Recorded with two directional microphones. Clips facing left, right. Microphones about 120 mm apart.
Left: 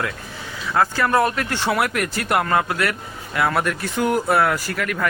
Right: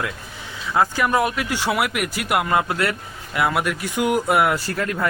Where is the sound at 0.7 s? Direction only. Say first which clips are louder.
Left 1 dB; 15° right (ahead or behind).